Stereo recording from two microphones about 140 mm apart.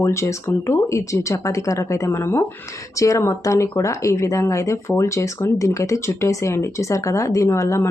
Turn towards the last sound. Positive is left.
turn(degrees=20)  # may be behind; listen again after turning